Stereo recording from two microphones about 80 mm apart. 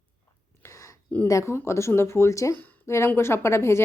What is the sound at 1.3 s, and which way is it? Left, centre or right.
A woman's voice, left.